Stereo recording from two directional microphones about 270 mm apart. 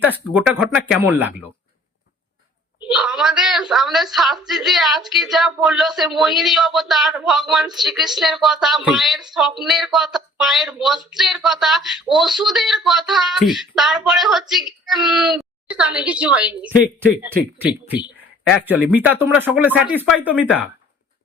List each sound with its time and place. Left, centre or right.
0.0 s a woman's voice: centre
2.9 s a woman's voice: centre